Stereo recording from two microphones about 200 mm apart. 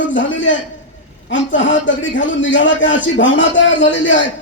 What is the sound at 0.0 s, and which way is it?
A man's voice, 70° left (ahead or behind).